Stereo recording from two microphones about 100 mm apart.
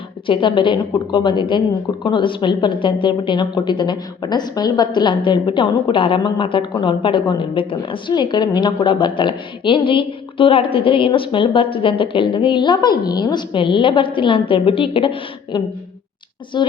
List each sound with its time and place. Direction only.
0.3 s a woman's voice: 55° left (ahead or behind)